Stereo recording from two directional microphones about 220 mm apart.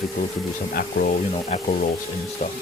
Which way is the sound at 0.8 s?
40° left (ahead or behind).